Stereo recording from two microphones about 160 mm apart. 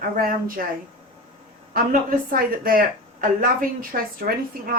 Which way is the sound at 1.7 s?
65° right (ahead or behind).